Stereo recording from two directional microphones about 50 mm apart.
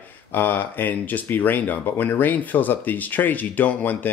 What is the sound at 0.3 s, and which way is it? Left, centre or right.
Speech, left.